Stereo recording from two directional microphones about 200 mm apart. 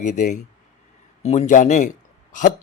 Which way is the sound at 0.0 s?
35° left (ahead or behind).